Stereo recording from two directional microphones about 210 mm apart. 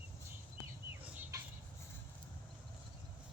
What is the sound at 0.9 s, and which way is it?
Fowl, 10° right (ahead or behind).